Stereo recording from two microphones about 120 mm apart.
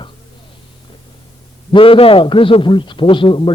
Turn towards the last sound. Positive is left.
turn(degrees=45)  # may be behind; listen again after turning